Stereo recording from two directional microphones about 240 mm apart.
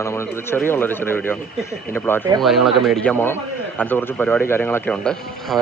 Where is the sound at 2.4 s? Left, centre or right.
Centre.